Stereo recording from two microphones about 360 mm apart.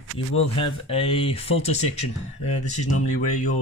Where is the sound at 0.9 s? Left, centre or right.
Centre.